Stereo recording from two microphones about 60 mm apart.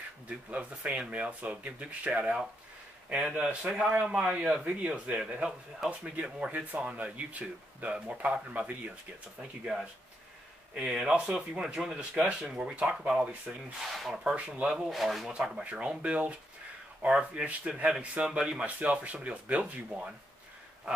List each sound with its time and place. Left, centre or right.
0.5 s speech: right
5.8 s speech: centre
6.1 s speech: right
10.7 s speech: centre
12.0 s speech: centre
14.9 s speech: centre
15.6 s speech: right